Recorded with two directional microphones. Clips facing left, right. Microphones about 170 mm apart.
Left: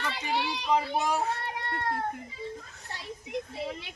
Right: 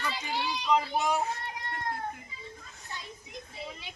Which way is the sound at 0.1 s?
70° left (ahead or behind).